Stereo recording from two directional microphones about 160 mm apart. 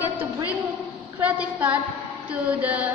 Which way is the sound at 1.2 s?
10° right (ahead or behind).